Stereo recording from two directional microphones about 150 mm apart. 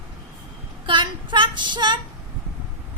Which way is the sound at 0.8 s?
35° right (ahead or behind).